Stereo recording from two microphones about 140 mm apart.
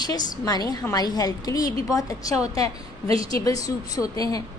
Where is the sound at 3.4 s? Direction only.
25° left (ahead or behind).